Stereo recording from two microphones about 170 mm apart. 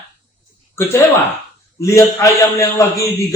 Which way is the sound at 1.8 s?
20° left (ahead or behind).